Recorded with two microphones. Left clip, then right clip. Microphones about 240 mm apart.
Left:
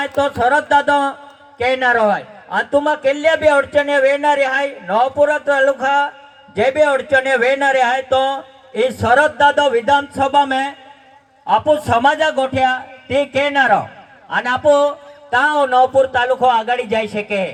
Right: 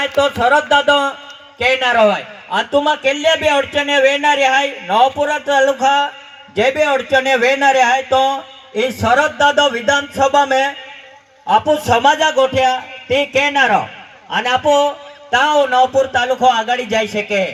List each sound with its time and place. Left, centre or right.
0.0 s a man's voice: right